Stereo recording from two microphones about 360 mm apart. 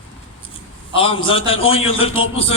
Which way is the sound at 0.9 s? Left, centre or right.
Centre.